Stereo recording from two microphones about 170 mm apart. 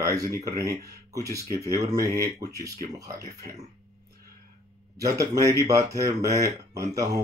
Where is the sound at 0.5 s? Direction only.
20° right (ahead or behind).